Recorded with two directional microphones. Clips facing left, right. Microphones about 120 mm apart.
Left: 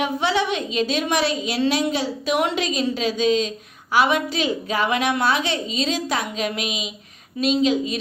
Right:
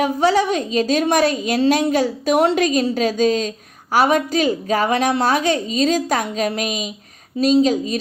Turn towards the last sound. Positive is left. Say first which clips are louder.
# right 4 dB
turn(degrees=-40)  # may be behind; listen again after turning